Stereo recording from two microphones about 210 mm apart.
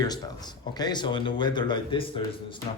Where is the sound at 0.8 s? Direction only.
20° left (ahead or behind).